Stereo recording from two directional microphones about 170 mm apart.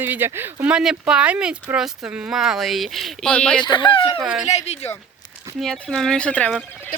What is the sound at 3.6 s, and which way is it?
Speech, 25° left (ahead or behind).